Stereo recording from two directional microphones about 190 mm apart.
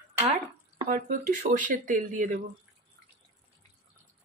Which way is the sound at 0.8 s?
45° right (ahead or behind).